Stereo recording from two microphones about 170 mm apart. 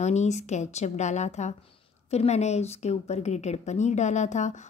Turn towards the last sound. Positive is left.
turn(degrees=45)  # may be behind; listen again after turning